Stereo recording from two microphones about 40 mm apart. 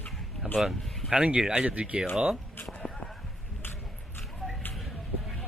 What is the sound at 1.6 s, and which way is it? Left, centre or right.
Speech, right.